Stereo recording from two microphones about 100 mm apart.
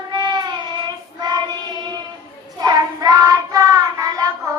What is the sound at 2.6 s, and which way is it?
Child singing, 40° right (ahead or behind).